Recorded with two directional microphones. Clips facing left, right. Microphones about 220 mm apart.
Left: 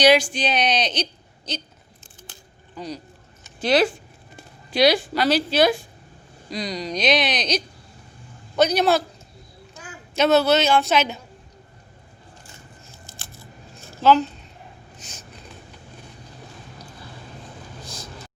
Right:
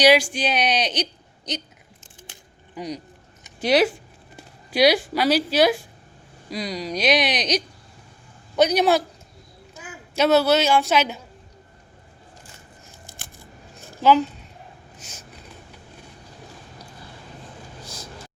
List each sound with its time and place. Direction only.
0.0 s a woman's voice: 10° right (ahead or behind)
2.3 s mechanisms: 15° right (ahead or behind)
3.4 s a sound: 15° right (ahead or behind)
4.7 s a woman's voice: 10° right (ahead or behind)
10.2 s a woman's voice: 10° right (ahead or behind)
13.1 s scissors: 15° right (ahead or behind)
17.8 s vehicle: 10° right (ahead or behind)